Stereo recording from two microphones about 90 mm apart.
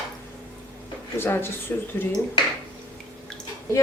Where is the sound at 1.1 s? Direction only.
25° left (ahead or behind).